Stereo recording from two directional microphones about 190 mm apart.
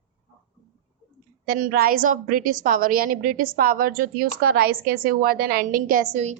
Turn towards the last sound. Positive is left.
turn(degrees=-40)  # may be behind; listen again after turning